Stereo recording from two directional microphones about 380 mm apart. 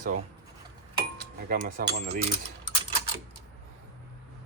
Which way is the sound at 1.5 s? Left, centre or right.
Right.